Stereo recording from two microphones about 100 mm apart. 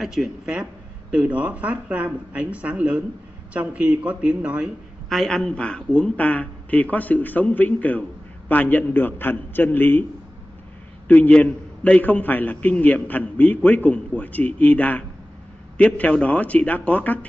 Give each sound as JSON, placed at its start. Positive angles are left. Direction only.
{"t": 0.0, "sound": "speech", "side_deg": -5}
{"t": 5.1, "sound": "a man's voice", "side_deg": 5}
{"t": 11.1, "sound": "a man's voice", "side_deg": 15}